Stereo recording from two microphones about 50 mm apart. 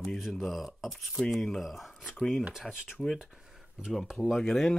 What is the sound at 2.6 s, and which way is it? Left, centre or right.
Speech, centre.